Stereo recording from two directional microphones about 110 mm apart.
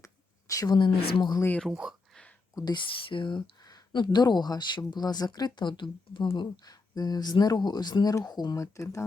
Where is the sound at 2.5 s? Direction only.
40° left (ahead or behind).